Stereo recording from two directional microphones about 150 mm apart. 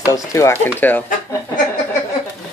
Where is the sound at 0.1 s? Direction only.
20° left (ahead or behind).